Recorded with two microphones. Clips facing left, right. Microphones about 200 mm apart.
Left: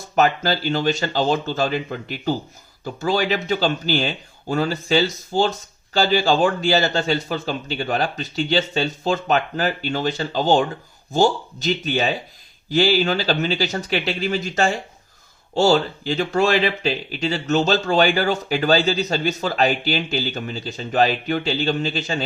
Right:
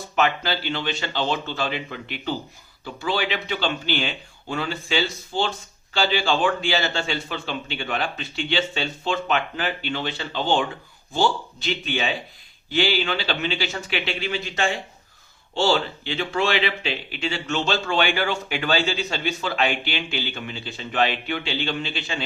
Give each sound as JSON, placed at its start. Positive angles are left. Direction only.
{"t": 0.2, "sound": "speech", "side_deg": 40}